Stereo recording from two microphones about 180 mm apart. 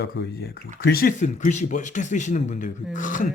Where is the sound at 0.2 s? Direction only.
80° left.